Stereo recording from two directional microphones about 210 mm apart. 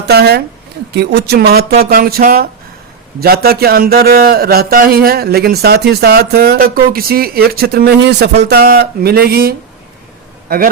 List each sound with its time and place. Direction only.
0.0 s a man's voice: 50° right (ahead or behind)